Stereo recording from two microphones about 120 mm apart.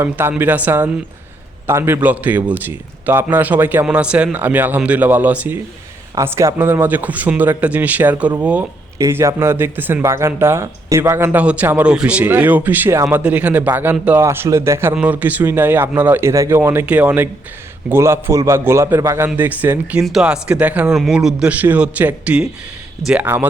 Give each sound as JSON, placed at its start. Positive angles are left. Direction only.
{"t": 0.0, "sound": "a man's voice", "side_deg": -20}
{"t": 6.1, "sound": "a man's voice", "side_deg": -25}
{"t": 14.2, "sound": "a man's voice", "side_deg": -20}
{"t": 20.0, "sound": "a man's voice", "side_deg": -5}